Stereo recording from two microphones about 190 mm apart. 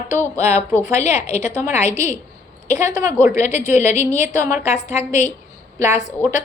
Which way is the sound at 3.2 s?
40° left (ahead or behind).